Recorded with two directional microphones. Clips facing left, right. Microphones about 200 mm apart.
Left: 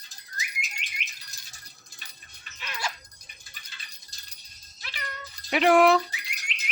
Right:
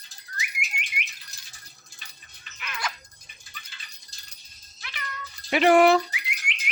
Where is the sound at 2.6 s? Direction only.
30° left (ahead or behind).